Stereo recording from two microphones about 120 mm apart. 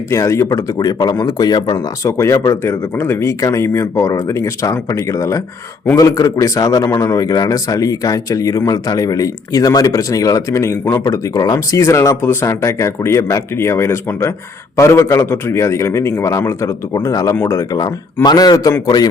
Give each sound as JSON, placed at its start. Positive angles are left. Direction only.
{"t": 0.1, "sound": "speech", "side_deg": 25}